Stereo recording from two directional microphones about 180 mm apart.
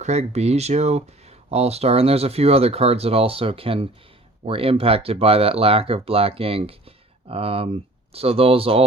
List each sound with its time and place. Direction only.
0.0 s speech: 35° right (ahead or behind)